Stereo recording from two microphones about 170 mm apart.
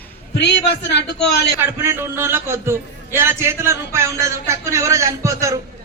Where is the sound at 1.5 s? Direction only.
15° right (ahead or behind).